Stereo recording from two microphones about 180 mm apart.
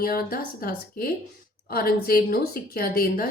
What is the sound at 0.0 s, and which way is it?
A woman's voice, 55° left (ahead or behind).